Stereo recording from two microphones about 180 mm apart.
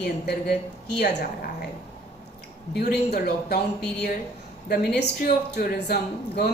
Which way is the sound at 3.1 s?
60° left (ahead or behind).